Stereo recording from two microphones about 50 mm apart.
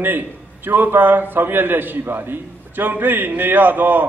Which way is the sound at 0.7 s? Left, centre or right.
Right.